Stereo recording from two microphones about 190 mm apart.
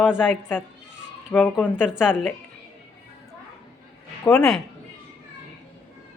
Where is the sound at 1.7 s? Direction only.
5° right (ahead or behind).